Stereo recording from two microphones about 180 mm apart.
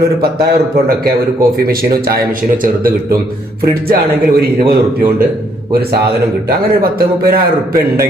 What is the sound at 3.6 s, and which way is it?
A man's voice, 55° right (ahead or behind).